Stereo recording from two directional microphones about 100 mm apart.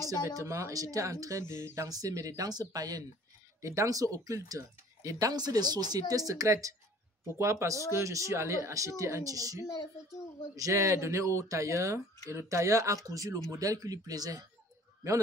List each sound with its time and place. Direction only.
0.4 s speech: 30° right (ahead or behind)
1.9 s speech: 35° right (ahead or behind)